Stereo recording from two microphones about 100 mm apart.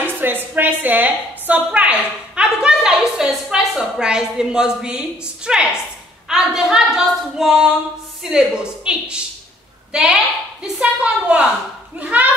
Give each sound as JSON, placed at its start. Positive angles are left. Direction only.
{"t": 0.0, "sound": "a woman's voice", "side_deg": -20}